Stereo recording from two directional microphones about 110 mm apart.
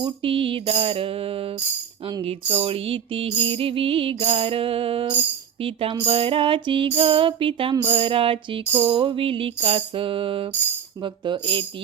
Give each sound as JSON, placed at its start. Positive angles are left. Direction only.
{"t": 0.0, "sound": "music", "side_deg": -55}